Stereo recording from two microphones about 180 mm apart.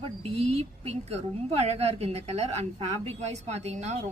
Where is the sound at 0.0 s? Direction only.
35° right (ahead or behind).